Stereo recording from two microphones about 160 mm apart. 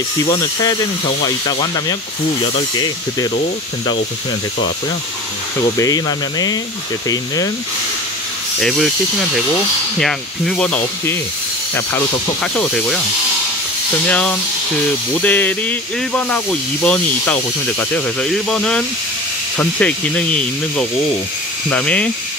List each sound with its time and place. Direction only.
0.3 s speech: 25° left (ahead or behind)
5.8 s speech: 25° left (ahead or behind)
8.5 s speech: centre (ahead or behind)
9.9 s speech: 5° left (ahead or behind)
12.5 s speech: 5° left (ahead or behind)
14.0 s speech: 10° left (ahead or behind)